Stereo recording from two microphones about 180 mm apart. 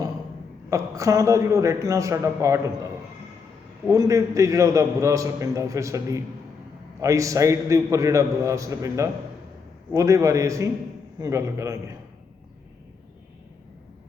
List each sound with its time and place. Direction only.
0.7 s a man's voice: 20° right (ahead or behind)
3.8 s a man's voice: 20° right (ahead or behind)